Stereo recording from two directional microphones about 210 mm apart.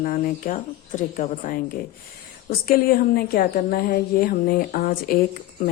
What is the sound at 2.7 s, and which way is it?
A woman's voice, 45° left (ahead or behind).